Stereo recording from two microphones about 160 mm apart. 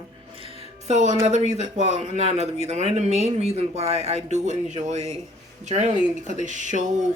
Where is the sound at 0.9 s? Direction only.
45° right (ahead or behind).